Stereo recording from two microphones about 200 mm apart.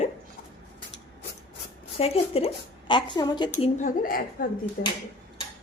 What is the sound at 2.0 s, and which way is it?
A woman's voice, 30° left (ahead or behind).